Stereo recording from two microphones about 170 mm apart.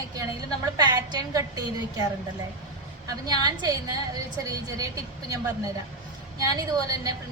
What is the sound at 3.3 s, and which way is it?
A woman's voice, 25° right (ahead or behind).